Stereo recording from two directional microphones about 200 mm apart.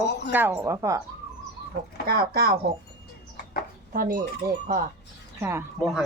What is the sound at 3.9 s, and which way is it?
Speech, 45° right (ahead or behind).